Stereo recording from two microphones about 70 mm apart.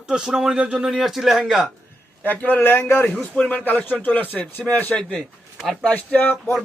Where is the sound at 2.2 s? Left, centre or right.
Left.